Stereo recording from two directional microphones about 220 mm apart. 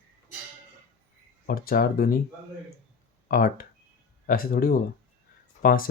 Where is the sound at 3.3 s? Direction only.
40° left (ahead or behind).